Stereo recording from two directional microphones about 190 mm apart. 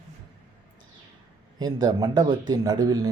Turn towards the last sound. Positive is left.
turn(degrees=-20)  # may be behind; listen again after turning